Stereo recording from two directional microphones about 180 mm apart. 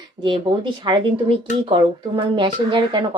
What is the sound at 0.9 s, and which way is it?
Speech, 25° right (ahead or behind).